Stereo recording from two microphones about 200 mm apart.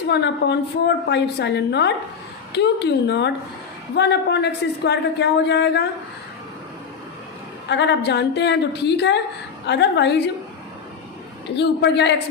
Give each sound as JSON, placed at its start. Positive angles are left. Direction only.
{"t": 0.1, "sound": "a man's voice", "side_deg": 60}
{"t": 7.7, "sound": "a man's voice", "side_deg": 60}
{"t": 11.5, "sound": "a man's voice", "side_deg": 60}